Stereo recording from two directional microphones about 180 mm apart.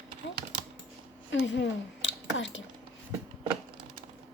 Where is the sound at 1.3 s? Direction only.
90° left.